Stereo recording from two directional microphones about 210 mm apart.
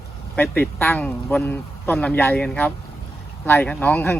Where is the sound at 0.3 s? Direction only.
10° left (ahead or behind).